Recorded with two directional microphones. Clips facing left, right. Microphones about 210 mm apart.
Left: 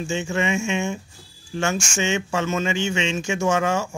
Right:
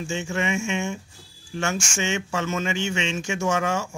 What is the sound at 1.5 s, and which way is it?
Speech, 30° left (ahead or behind).